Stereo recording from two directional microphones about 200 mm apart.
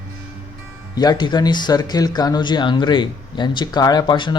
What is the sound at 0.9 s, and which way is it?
Speech, 20° left (ahead or behind).